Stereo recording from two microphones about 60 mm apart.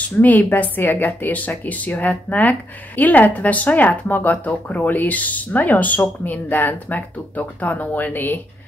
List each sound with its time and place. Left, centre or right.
0.2 s speech: left